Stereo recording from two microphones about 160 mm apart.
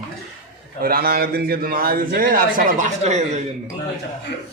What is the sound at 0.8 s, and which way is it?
A man's voice, 70° right (ahead or behind).